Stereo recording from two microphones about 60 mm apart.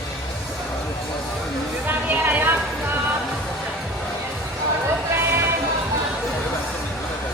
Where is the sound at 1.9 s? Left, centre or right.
Right.